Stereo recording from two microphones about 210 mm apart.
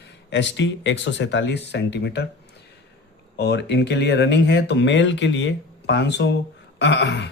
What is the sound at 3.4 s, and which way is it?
Speech, 55° left (ahead or behind).